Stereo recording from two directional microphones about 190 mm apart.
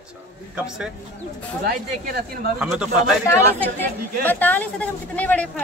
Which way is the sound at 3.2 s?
10° left (ahead or behind).